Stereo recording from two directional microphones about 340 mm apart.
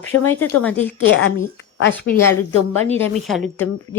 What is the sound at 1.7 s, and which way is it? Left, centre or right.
Speech, left.